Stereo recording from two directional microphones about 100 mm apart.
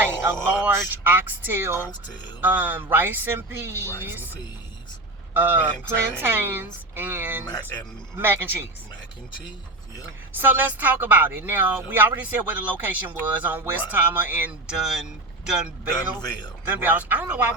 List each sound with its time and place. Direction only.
0.0 s speech: 20° right (ahead or behind)
5.3 s speech: 20° right (ahead or behind)
10.3 s speech: 20° right (ahead or behind)
14.8 s speech: 5° right (ahead or behind)
16.0 s a man's voice: 45° left (ahead or behind)
16.7 s speech: 15° right (ahead or behind)